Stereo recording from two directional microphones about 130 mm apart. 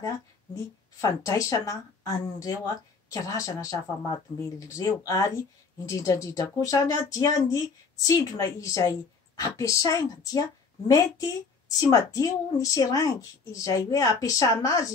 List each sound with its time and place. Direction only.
1.0 s a woman's voice: 25° left (ahead or behind)